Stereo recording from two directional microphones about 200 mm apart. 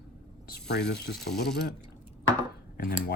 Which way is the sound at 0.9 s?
50° left (ahead or behind).